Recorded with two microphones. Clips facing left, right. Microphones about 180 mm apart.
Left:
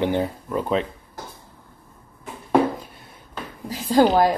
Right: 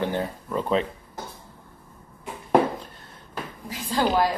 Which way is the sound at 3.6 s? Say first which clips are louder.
Left 8 dB; 40° left (ahead or behind).